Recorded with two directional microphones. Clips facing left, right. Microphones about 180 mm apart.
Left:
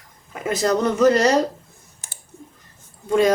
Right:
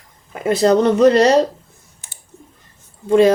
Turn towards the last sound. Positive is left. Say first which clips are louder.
# right 6 dB
turn(degrees=-30)  # may be behind; listen again after turning